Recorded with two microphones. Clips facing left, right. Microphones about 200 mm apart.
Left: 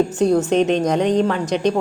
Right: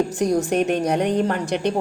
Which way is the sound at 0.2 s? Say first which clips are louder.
Left 4 dB; 10° right (ahead or behind).